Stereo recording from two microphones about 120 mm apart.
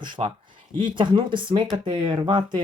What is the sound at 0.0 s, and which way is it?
Speech, 45° right (ahead or behind).